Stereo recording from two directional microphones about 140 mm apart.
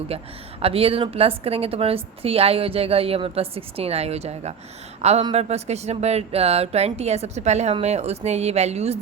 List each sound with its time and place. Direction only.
0.6 s a woman's voice: 45° right (ahead or behind)